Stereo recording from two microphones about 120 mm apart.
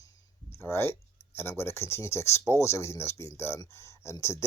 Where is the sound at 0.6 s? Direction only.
20° left (ahead or behind).